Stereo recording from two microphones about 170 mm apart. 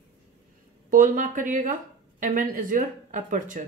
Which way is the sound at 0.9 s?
50° right (ahead or behind).